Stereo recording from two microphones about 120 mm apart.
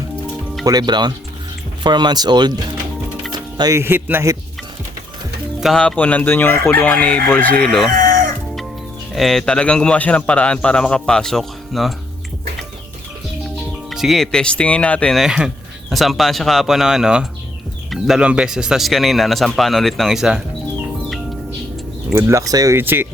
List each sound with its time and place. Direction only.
0.6 s speech: 35° right (ahead or behind)
3.3 s music: 35° right (ahead or behind)
3.8 s speech: 20° right (ahead or behind)
5.5 s speech: centre (ahead or behind)
5.8 s a man's voice: 10° left (ahead or behind)
9.1 s a man's voice: centre (ahead or behind)
13.9 s a man's voice: centre (ahead or behind)
15.2 s a man's voice: 5° right (ahead or behind)
22.1 s speech: 25° right (ahead or behind)
22.8 s speech: 15° right (ahead or behind)